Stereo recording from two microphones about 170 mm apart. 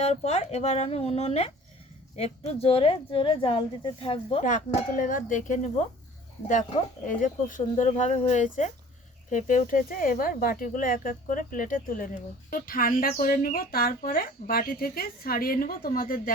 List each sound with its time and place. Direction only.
0.0 s speech: 40° left (ahead or behind)
4.4 s speech: 50° left (ahead or behind)
7.1 s speech: 50° left (ahead or behind)